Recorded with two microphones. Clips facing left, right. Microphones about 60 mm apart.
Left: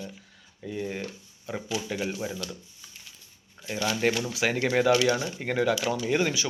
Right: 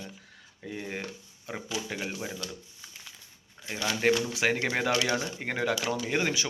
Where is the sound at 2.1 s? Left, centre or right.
Centre.